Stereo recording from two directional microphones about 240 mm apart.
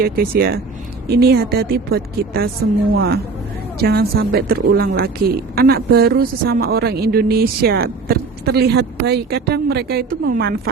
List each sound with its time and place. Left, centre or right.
0.0 s speech: right